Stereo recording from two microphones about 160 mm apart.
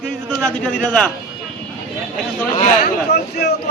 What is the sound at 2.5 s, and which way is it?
Speech, 50° left (ahead or behind).